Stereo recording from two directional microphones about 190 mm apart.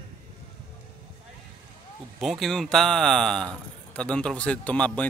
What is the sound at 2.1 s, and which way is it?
A man's voice, centre (ahead or behind).